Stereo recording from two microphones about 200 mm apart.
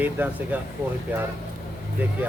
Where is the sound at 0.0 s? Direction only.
10° right (ahead or behind).